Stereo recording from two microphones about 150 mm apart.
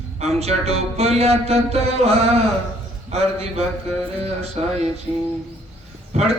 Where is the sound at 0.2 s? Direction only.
45° right (ahead or behind).